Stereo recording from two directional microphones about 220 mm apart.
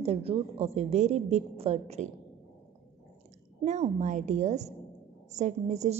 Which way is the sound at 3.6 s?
30° right (ahead or behind).